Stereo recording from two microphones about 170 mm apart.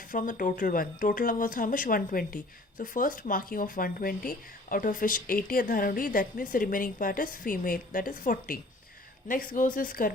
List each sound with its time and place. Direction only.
0.1 s speech: 50° left (ahead or behind)